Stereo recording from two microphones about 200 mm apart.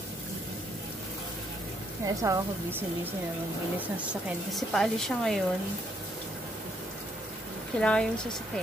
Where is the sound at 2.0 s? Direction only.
15° right (ahead or behind); by 5.4 s centre (ahead or behind).